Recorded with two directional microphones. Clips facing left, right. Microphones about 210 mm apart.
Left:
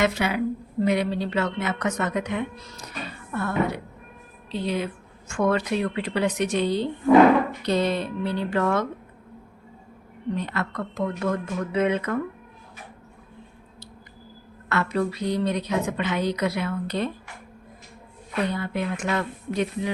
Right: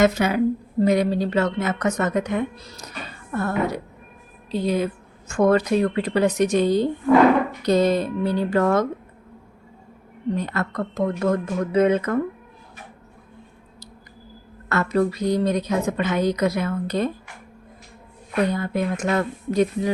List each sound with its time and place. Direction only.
0.0 s a woman's voice: 45° right (ahead or behind)
10.3 s a woman's voice: 45° right (ahead or behind)
14.7 s a woman's voice: 45° right (ahead or behind)
18.5 s speech: 40° right (ahead or behind)